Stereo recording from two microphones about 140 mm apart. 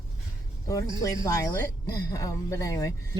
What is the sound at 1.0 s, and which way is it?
Speech, 25° left (ahead or behind).